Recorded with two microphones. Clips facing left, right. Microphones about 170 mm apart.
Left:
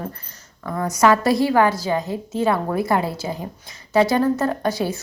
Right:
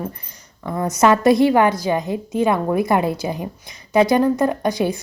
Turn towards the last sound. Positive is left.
turn(degrees=-15)  # may be behind; listen again after turning